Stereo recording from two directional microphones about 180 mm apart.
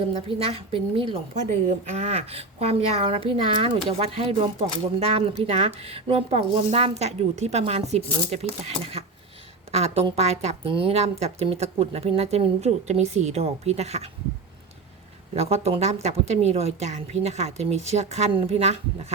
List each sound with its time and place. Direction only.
0.1 s speech: 30° right (ahead or behind)
15.4 s speech: 35° right (ahead or behind)